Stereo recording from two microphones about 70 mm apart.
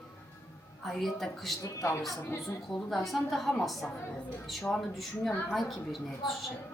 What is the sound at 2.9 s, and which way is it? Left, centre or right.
A woman's voice, centre.